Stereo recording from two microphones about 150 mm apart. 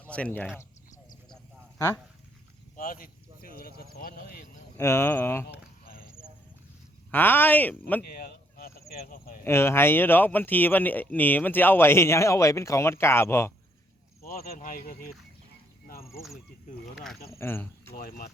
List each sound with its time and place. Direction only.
0.1 s speech: 10° left (ahead or behind)
2.7 s speech: 65° left (ahead or behind); by 4.4 s 85° left
4.8 s speech: 20° left (ahead or behind)
5.5 s a sound: 75° left (ahead or behind)
7.1 s speech: 15° left (ahead or behind)
8.0 s a sound: 85° left
8.9 s speech: 85° left
9.4 s speech: 15° left (ahead or behind)
14.3 s speech: 85° left; by 14.9 s 70° left (ahead or behind)
17.3 s speech: 15° left (ahead or behind)
17.9 s speech: 80° left